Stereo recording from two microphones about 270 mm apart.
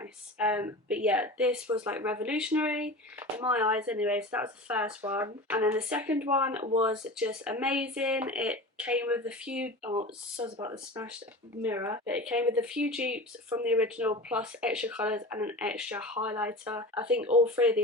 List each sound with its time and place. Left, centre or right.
0.0 s speech: centre